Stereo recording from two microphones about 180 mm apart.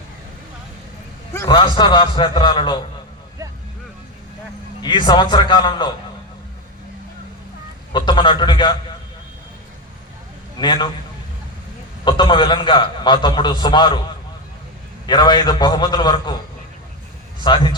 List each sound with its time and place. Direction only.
1.5 s a man's voice: 25° left (ahead or behind)
4.8 s a man's voice: 25° left (ahead or behind)
7.9 s a man's voice: 25° left (ahead or behind)
10.6 s a man's voice: 25° left (ahead or behind)
12.0 s a man's voice: 25° left (ahead or behind)
15.0 s a man's voice: 25° left (ahead or behind)
17.4 s a man's voice: 25° left (ahead or behind)